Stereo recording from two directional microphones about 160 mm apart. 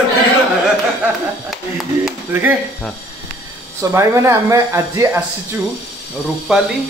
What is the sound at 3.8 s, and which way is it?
Speech, 15° right (ahead or behind).